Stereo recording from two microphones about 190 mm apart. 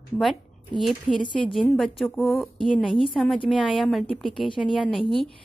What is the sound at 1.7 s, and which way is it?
A woman's voice, centre (ahead or behind).